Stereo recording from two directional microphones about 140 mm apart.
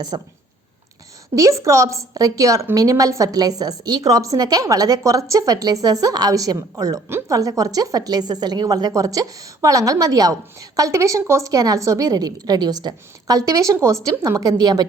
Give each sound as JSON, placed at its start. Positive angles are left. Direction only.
{"t": 0.1, "sound": "speech", "side_deg": -30}
{"t": 1.4, "sound": "a woman's voice", "side_deg": -20}